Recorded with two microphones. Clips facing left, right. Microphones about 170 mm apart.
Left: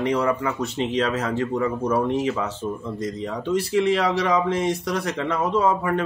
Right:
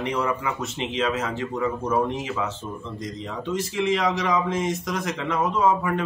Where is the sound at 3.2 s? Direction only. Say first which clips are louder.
Left 3 dB; 35° left (ahead or behind).